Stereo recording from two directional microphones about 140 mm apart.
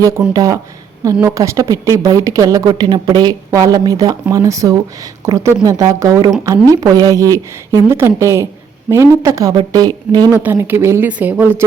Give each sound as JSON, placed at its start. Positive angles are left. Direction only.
{"t": 0.3, "sound": "a woman's voice", "side_deg": -25}
{"t": 10.4, "sound": "speech", "side_deg": -15}